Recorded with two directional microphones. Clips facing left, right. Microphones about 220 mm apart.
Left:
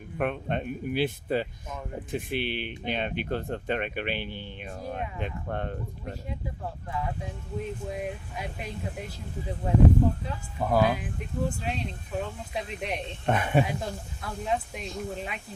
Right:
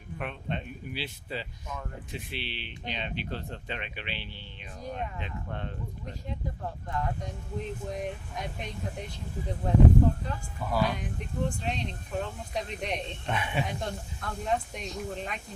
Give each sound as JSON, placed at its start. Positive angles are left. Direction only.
{"t": 0.2, "sound": "speech", "side_deg": 50}
{"t": 6.9, "sound": "speech", "side_deg": 5}
{"t": 10.6, "sound": "speech", "side_deg": 55}
{"t": 10.9, "sound": "speech", "side_deg": 5}
{"t": 13.2, "sound": "speech", "side_deg": 50}
{"t": 13.7, "sound": "speech", "side_deg": 5}